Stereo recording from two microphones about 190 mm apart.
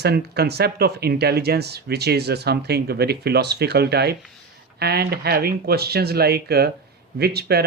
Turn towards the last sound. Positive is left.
turn(degrees=-60)  # may be behind; listen again after turning